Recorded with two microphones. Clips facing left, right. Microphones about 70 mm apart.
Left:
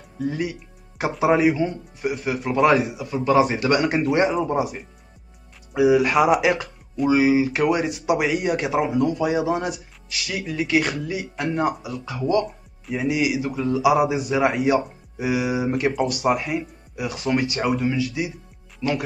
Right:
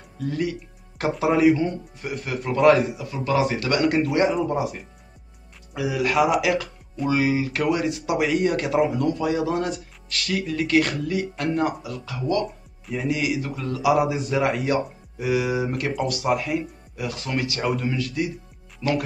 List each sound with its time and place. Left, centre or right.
0.2 s speech: centre
1.5 s speech: centre
5.7 s speech: left
17.6 s speech: centre
18.8 s speech: centre